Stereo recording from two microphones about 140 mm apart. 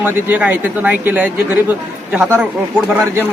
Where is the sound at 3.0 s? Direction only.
20° right (ahead or behind).